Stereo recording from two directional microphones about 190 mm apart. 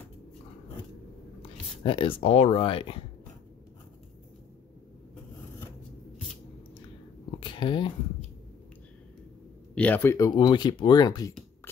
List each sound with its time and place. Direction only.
1.4 s speech: 25° left (ahead or behind)
7.2 s biting: 25° left (ahead or behind)
9.8 s speech: 10° left (ahead or behind)